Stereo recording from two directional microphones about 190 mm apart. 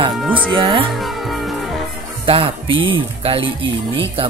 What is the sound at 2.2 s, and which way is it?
Speech, 30° right (ahead or behind).